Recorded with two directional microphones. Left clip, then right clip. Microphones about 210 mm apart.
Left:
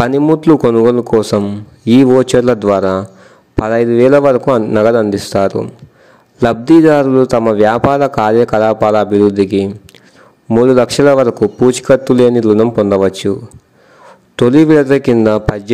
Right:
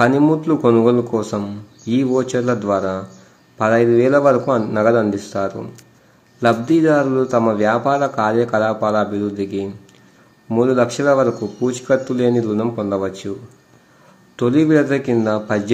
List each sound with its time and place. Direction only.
0.3 s a man's voice: 45° left (ahead or behind)